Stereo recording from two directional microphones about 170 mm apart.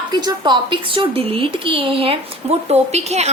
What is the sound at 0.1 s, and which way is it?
A woman's voice, 25° right (ahead or behind).